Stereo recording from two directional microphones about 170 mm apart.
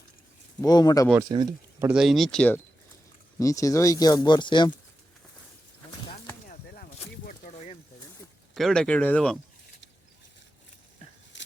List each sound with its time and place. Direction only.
0.6 s speech: 25° left (ahead or behind)
1.2 s speech: 25° right (ahead or behind)
1.9 s speech: centre (ahead or behind)
3.3 s speech: 20° left (ahead or behind)
7.3 s a sound: 45° left (ahead or behind)
8.5 s speech: centre (ahead or behind)
11.3 s a sound: 90° left